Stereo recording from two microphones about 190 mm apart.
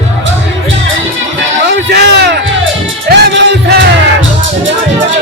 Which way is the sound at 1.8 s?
60° right (ahead or behind).